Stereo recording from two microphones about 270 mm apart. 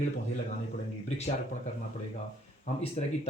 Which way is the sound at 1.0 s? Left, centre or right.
Left.